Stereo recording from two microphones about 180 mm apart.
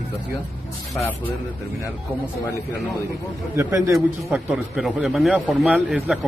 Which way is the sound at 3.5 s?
15° right (ahead or behind).